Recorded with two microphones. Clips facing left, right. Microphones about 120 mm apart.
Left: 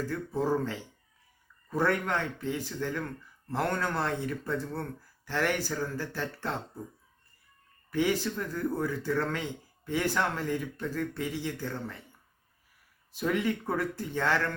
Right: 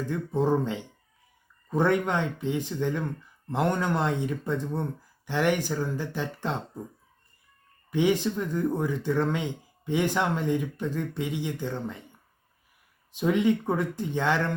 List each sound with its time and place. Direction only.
0.0 s speech: 20° right (ahead or behind)
7.9 s speech: 20° right (ahead or behind)
13.1 s speech: 20° right (ahead or behind)